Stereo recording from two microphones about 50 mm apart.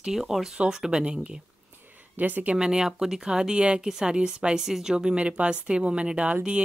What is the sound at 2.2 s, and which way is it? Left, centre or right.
Speech, right.